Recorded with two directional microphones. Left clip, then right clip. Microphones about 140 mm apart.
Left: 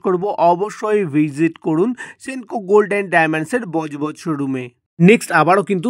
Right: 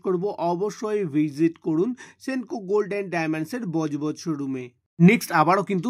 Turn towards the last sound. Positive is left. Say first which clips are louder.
# left 6 dB
turn(degrees=30)  # may be behind; listen again after turning